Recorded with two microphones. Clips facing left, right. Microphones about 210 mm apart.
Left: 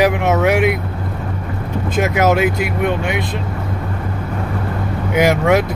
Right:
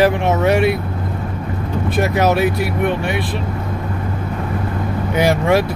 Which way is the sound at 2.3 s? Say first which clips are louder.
Even; 15° left (ahead or behind).